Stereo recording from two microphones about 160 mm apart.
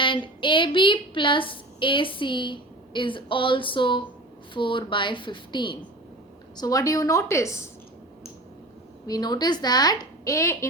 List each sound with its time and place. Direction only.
0.0 s a sound: 30° left (ahead or behind)
6.6 s a woman's voice: 20° left (ahead or behind)
9.0 s a woman's voice: 25° left (ahead or behind)